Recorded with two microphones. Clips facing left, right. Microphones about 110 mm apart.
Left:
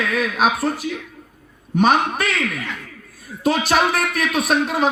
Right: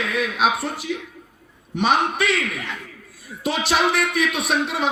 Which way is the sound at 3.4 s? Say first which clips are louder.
Left 3 dB; 45° left (ahead or behind).